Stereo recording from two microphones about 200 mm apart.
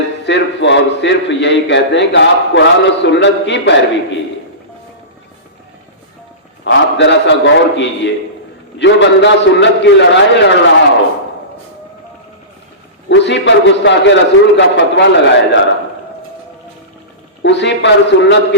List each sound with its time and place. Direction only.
0.3 s a man's voice: 60° left (ahead or behind)
6.7 s a man's voice: 65° left (ahead or behind)
13.1 s a man's voice: 60° left (ahead or behind)
17.4 s a man's voice: 60° left (ahead or behind)